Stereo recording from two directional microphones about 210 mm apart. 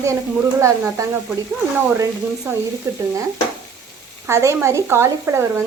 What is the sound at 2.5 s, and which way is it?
Speech, 15° right (ahead or behind).